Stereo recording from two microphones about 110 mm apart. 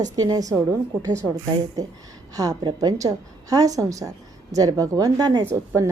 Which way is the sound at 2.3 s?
35° right (ahead or behind).